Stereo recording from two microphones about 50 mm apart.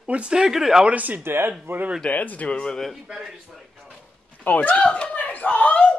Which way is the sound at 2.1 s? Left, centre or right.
Left.